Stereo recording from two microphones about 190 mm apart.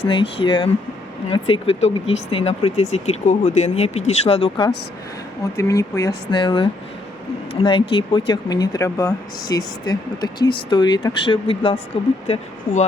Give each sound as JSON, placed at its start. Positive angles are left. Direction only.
{"t": 0.0, "sound": "speech", "side_deg": 25}
{"t": 5.5, "sound": "speech", "side_deg": 15}